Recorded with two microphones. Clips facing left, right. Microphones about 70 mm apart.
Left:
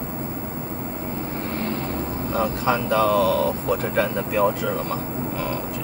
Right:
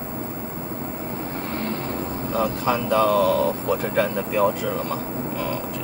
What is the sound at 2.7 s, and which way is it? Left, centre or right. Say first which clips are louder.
Speech: even; centre.